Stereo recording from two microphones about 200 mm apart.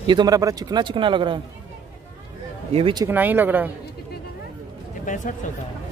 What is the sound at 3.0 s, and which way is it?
Speech, 10° right (ahead or behind).